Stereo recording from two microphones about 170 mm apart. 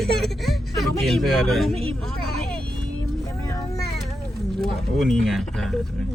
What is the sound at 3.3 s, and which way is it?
Vehicle, 20° left (ahead or behind).